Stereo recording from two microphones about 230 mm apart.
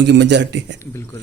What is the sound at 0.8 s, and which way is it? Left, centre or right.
Speech, centre.